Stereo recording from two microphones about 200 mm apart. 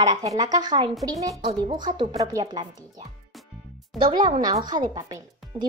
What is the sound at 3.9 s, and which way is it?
Speech, 25° right (ahead or behind).